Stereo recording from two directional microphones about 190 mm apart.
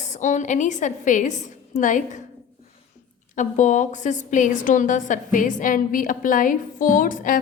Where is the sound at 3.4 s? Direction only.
40° left (ahead or behind).